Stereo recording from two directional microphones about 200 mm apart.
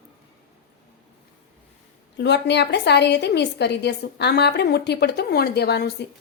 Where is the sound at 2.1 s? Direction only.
60° left (ahead or behind).